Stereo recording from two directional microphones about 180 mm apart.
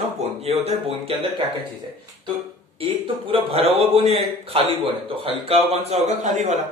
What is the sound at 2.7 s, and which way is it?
A man's voice, 30° right (ahead or behind).